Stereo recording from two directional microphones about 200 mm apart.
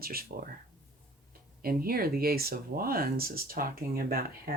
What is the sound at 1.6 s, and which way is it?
Speech, 50° right (ahead or behind).